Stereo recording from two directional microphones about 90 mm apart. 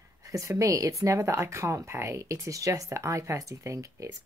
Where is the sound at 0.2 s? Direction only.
35° right (ahead or behind).